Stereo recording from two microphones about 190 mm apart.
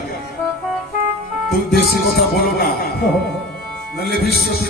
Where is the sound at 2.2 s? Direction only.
55° left (ahead or behind).